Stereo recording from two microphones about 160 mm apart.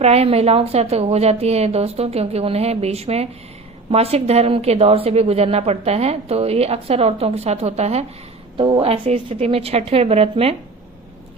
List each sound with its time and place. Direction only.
0.0 s a woman's voice: 40° right (ahead or behind)
8.5 s a woman's voice: 30° right (ahead or behind)